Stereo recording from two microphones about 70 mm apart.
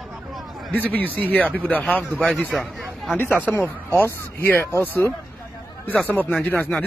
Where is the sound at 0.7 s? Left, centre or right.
Left.